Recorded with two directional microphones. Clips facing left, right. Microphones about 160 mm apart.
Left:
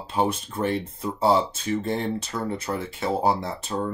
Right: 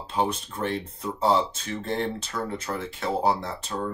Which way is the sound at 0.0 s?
10° left (ahead or behind).